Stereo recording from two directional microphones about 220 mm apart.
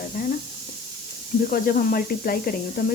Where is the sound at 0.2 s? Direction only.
40° left (ahead or behind).